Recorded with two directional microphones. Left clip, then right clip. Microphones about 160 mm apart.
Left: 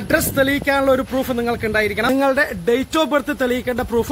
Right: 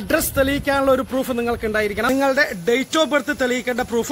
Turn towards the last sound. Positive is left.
turn(degrees=-15)  # may be behind; listen again after turning